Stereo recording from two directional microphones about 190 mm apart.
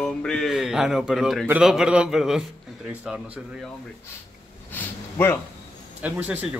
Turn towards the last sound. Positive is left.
turn(degrees=-10)  # may be behind; listen again after turning